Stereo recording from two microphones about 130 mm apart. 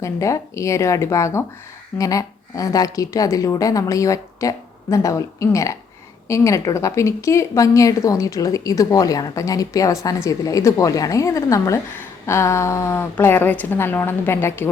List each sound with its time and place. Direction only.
0.0 s a woman's voice: 25° left (ahead or behind)